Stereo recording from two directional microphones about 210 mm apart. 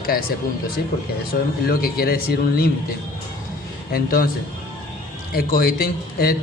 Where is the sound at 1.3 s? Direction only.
45° left (ahead or behind).